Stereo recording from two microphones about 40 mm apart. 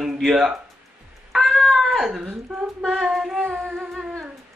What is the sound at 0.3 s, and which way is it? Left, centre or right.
Speech, centre.